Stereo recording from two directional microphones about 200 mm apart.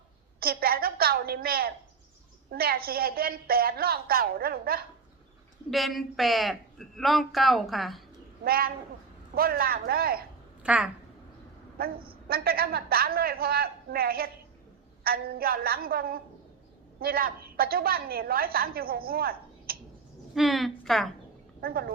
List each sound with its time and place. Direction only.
0.3 s a sound: 50° right (ahead or behind)
2.5 s a woman's voice: 50° right (ahead or behind)
5.7 s a man's voice: centre (ahead or behind)
8.4 s a woman's voice: 50° right (ahead or behind)
10.6 s speech: 5° right (ahead or behind)
11.8 s a woman's voice: 50° right (ahead or behind)
20.3 s a woman's voice: centre (ahead or behind)
21.6 s a woman's voice: 50° right (ahead or behind)